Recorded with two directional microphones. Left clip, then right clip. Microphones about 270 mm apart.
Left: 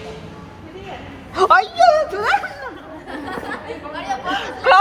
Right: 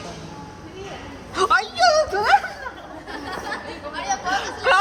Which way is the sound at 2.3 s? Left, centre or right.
Centre.